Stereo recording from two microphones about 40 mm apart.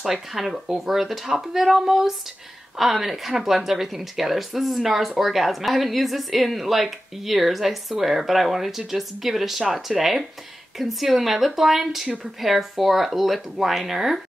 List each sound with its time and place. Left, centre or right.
0.0 s speech: centre